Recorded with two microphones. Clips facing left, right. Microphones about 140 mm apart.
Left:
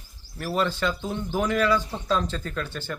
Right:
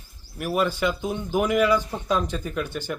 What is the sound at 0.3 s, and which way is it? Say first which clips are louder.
Speech: right 2 dB; 10° right (ahead or behind).